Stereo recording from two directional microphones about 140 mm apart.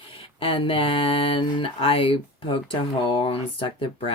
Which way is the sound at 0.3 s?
40° left (ahead or behind).